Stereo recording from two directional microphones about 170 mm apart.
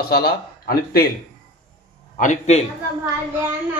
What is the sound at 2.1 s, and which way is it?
Speech, 45° left (ahead or behind).